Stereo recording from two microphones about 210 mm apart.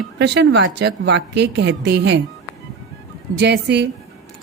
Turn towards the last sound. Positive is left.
turn(degrees=-55)  # may be behind; listen again after turning